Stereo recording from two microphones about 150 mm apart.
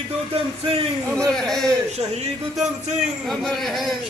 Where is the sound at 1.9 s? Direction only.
45° right (ahead or behind).